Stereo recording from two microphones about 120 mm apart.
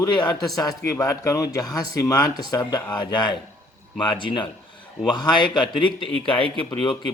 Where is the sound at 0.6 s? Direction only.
30° left (ahead or behind).